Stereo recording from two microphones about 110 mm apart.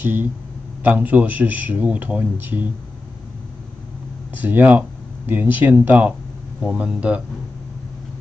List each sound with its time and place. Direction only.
0.0 s speech: 15° right (ahead or behind)
4.4 s speech: 15° right (ahead or behind)
6.6 s speech: 5° right (ahead or behind)